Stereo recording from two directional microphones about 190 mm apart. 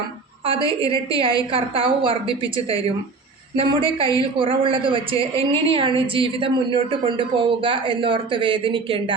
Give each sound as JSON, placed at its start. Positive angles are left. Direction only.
{"t": 0.4, "sound": "a woman's voice", "side_deg": -30}